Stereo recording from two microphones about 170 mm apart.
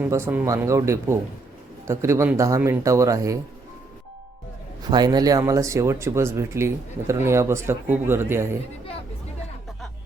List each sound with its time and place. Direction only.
0.0 s speech: 15° right (ahead or behind)
4.8 s speech: 25° right (ahead or behind)